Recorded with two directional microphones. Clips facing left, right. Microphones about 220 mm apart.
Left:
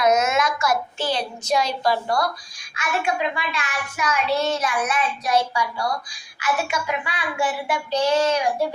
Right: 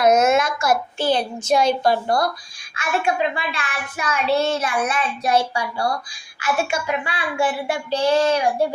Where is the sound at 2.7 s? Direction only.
30° right (ahead or behind).